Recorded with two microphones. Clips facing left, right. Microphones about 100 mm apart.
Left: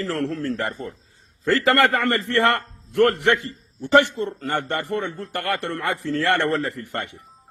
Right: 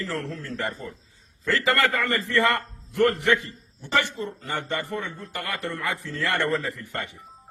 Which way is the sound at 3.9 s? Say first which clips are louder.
Left 8 dB; 65° left (ahead or behind).